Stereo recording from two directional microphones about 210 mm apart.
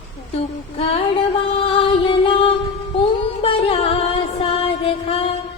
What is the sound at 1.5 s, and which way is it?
Music, 25° left (ahead or behind).